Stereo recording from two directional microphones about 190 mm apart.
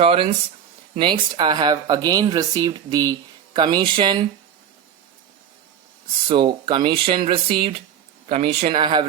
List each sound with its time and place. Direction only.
0.0 s speech: 30° right (ahead or behind)
6.2 s speech: 25° right (ahead or behind)